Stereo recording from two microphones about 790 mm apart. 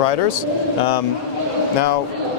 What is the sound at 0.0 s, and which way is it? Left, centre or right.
A man's voice, left.